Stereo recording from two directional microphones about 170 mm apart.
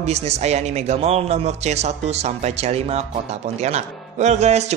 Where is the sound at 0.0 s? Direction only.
40° right (ahead or behind).